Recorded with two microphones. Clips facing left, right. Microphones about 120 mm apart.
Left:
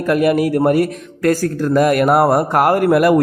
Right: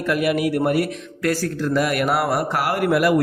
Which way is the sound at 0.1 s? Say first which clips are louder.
Left 6 dB; 40° left (ahead or behind).